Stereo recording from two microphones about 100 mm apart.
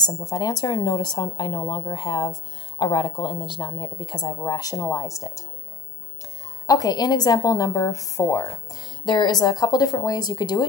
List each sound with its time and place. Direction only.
0.0 s speech: 40° left (ahead or behind)
6.7 s a woman's voice: 40° left (ahead or behind)
8.7 s a woman's voice: 45° left (ahead or behind)